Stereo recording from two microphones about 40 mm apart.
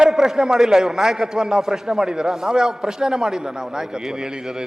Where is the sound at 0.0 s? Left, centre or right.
Centre.